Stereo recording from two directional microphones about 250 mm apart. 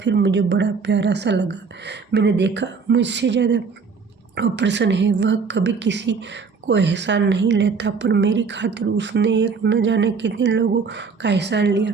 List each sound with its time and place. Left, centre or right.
0.0 s a woman's voice: right